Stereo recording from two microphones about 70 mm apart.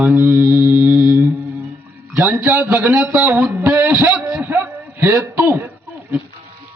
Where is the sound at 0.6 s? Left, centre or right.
Right.